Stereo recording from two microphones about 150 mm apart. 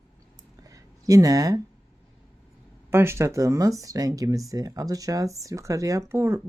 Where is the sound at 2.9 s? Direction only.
15° right (ahead or behind).